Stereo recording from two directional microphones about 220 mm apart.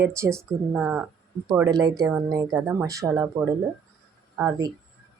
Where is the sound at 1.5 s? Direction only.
15° right (ahead or behind).